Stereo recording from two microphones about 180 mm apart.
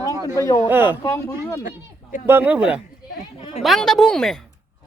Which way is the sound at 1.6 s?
45° left (ahead or behind).